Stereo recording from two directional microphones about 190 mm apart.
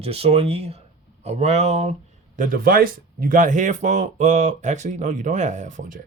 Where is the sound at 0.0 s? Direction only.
30° right (ahead or behind).